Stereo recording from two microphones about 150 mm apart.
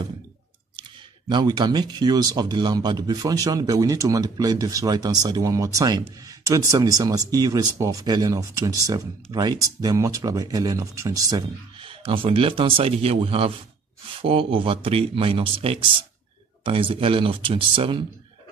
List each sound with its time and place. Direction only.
1.3 s speech: 30° right (ahead or behind)
11.9 s a man's voice: 35° right (ahead or behind)